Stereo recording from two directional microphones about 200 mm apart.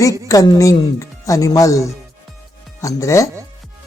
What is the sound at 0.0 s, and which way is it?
Speech, 15° left (ahead or behind).